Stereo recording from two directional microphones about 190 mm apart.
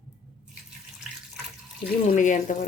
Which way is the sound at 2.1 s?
40° left (ahead or behind).